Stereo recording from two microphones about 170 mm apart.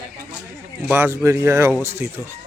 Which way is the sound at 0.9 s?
15° right (ahead or behind).